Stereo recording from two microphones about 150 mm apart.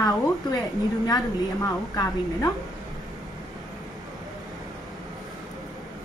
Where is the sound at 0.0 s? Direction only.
25° left (ahead or behind).